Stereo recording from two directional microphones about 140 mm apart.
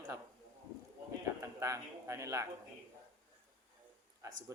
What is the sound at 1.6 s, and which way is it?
Speech, 20° right (ahead or behind).